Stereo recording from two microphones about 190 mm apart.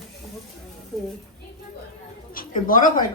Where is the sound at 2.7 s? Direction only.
45° left (ahead or behind).